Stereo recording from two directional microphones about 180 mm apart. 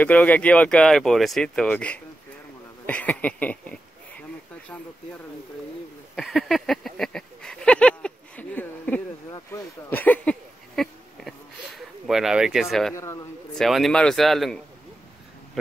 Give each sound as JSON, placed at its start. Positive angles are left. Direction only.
{"t": 0.0, "sound": "speech", "side_deg": 10}
{"t": 6.1, "sound": "a sound", "side_deg": 0}
{"t": 9.3, "sound": "speech", "side_deg": 10}
{"t": 10.8, "sound": "a sound", "side_deg": 0}
{"t": 12.9, "sound": "speech", "side_deg": 15}
{"t": 13.6, "sound": "speech", "side_deg": 0}